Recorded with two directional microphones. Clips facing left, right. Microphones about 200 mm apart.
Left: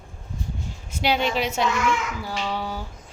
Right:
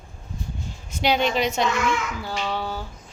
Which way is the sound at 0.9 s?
5° left (ahead or behind).